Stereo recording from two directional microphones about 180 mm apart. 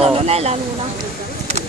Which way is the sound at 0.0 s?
35° right (ahead or behind).